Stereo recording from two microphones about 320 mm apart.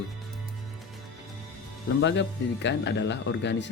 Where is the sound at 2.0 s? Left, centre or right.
Left.